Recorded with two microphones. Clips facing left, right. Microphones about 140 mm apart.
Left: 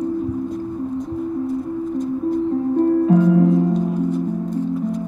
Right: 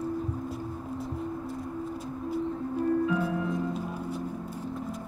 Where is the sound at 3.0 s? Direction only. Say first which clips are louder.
Left 14 dB; 40° left (ahead or behind).